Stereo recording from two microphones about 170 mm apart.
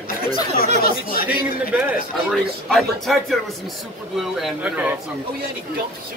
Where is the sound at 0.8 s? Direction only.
60° left (ahead or behind).